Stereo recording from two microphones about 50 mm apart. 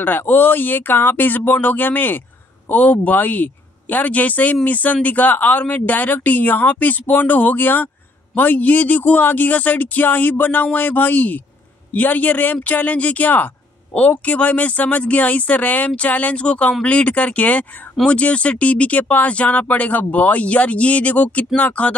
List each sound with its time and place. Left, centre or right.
0.0 s speech: left